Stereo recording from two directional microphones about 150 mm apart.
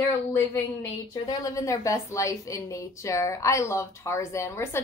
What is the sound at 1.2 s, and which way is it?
A woman's voice, 25° left (ahead or behind).